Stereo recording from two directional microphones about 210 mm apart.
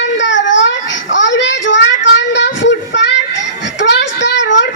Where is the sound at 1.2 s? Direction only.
60° left (ahead or behind).